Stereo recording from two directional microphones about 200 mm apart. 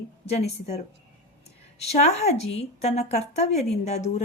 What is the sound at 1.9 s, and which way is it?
Speech, 35° left (ahead or behind).